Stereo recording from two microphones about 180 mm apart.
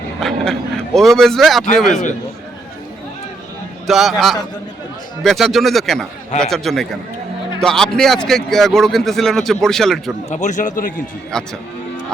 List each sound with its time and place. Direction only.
0.2 s a man's voice: centre (ahead or behind)
3.8 s a man's voice: centre (ahead or behind)
10.2 s a man's voice: 40° left (ahead or behind)
11.3 s a man's voice: 5° left (ahead or behind)